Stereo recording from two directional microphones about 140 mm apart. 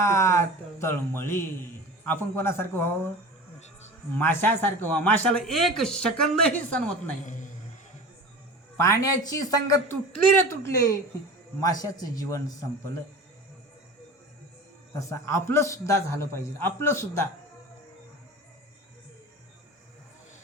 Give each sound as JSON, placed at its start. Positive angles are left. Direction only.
{"t": 0.0, "sound": "speech", "side_deg": 20}
{"t": 4.2, "sound": "speech", "side_deg": 15}
{"t": 8.8, "sound": "a man's voice", "side_deg": 25}
{"t": 14.9, "sound": "a man's voice", "side_deg": 20}